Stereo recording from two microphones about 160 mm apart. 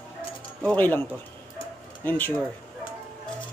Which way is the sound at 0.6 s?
10° left (ahead or behind).